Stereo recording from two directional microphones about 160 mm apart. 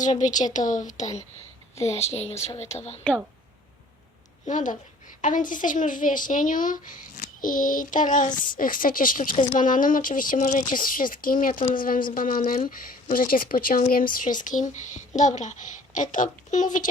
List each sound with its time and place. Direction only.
0.0 s a woman's voice: 50° left (ahead or behind)
4.4 s a woman's voice: 50° left (ahead or behind)